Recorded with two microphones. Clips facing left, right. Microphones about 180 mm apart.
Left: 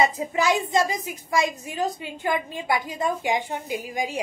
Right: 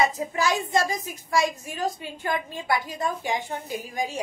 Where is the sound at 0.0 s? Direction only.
20° left (ahead or behind).